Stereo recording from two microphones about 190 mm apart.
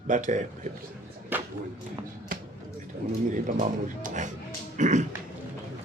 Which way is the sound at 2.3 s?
50° right (ahead or behind).